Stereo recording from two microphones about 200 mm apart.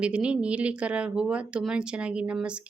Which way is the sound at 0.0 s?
5° right (ahead or behind).